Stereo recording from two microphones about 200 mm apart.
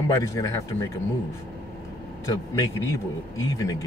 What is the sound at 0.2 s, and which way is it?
Speech, 15° left (ahead or behind).